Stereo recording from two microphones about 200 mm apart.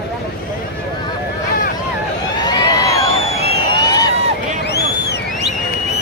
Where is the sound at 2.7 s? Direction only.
15° left (ahead or behind).